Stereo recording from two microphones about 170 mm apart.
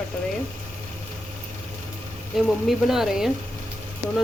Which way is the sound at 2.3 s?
Centre (ahead or behind).